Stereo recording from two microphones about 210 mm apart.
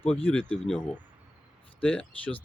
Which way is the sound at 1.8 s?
5° left (ahead or behind).